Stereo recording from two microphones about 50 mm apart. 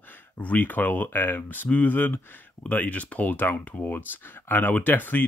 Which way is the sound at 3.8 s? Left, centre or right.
Left.